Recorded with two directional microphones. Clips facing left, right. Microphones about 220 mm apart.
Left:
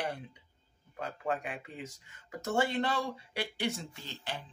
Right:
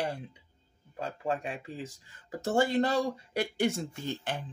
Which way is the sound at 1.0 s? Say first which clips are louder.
Right 2 dB; 25° right (ahead or behind).